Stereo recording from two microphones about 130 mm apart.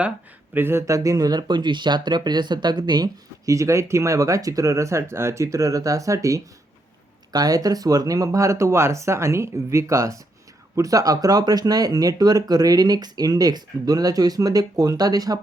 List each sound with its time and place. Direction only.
0.5 s speech: 20° right (ahead or behind)